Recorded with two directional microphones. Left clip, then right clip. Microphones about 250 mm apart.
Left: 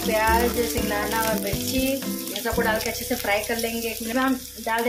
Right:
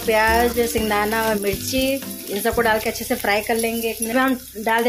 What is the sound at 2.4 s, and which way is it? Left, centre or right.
Speech, right.